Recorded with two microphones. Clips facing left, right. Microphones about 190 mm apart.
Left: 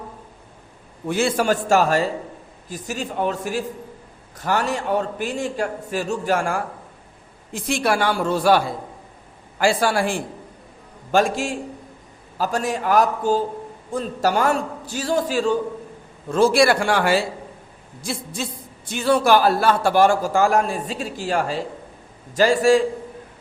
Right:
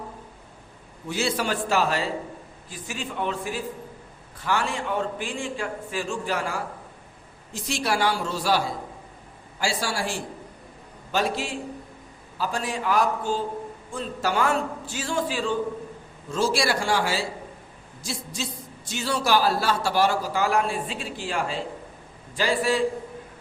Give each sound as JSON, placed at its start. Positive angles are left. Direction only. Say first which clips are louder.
{"t": 1.0, "sound": "a woman's voice", "louder": "left 7 dB", "side_deg": 55}
{"t": 16.3, "sound": "a woman's voice", "louder": "left 8 dB", "side_deg": 55}